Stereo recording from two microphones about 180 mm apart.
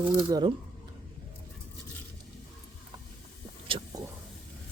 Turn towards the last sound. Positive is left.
turn(degrees=-30)  # may be behind; listen again after turning